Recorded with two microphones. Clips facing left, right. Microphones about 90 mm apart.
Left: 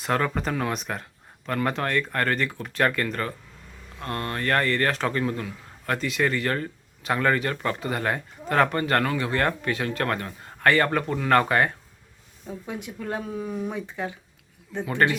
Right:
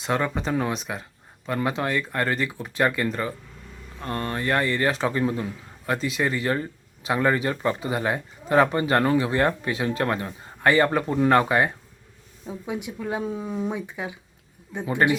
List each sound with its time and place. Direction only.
0.0 s a man's voice: 5° right (ahead or behind)
13.2 s a man's voice: 25° right (ahead or behind)